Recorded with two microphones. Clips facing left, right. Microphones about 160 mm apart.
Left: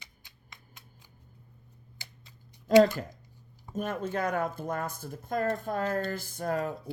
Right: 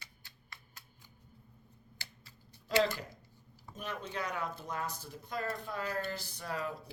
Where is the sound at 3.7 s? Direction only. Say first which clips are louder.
Left 9 dB; 50° left (ahead or behind).